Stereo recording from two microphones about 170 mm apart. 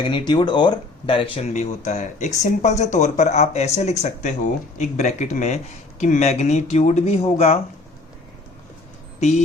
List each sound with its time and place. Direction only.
0.0 s speech: 30° left (ahead or behind)